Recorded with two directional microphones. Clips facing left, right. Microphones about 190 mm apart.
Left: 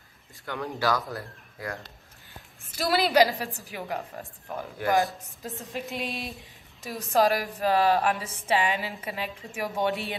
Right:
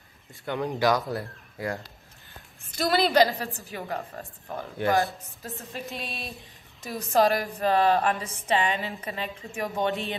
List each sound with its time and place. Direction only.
0.5 s speech: 20° right (ahead or behind)
2.8 s speech: 5° left (ahead or behind)
5.4 s a woman's voice: 15° left (ahead or behind)
6.3 s speech: centre (ahead or behind)